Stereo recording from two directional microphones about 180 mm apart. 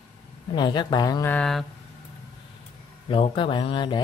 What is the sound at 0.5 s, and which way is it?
Speech, 25° left (ahead or behind).